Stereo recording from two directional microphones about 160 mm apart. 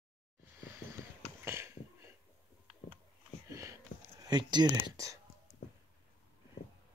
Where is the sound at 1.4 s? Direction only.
15° right (ahead or behind).